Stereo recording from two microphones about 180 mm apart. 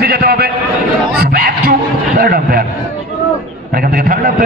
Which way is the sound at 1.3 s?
60° right (ahead or behind).